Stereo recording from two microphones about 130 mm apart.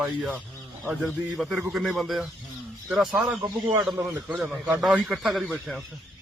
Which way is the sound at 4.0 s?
15° right (ahead or behind).